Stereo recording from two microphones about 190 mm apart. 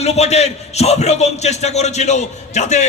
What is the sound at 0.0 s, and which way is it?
A man's voice, 35° left (ahead or behind).